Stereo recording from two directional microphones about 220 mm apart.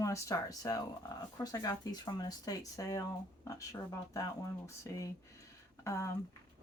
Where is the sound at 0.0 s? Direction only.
15° left (ahead or behind).